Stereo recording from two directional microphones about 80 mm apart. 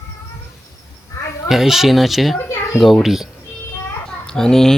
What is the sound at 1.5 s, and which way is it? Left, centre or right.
A child's voice, centre.